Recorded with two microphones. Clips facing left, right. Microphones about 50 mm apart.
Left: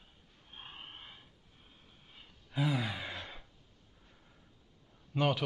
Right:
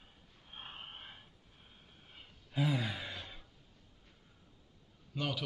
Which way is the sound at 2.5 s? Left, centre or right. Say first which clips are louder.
Left 1 dB; centre.